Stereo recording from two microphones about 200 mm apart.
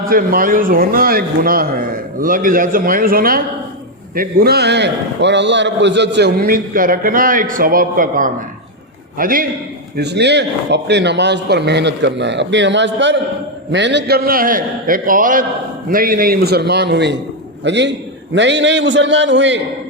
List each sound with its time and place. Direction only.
0.1 s a man's voice: 45° right (ahead or behind)
10.0 s a man's voice: 55° right (ahead or behind)